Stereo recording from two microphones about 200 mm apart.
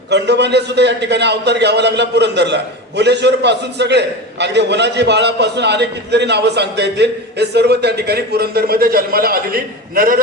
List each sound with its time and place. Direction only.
0.1 s a man's voice: 60° right (ahead or behind)